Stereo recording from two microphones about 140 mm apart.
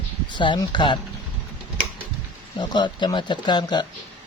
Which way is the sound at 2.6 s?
30° left (ahead or behind).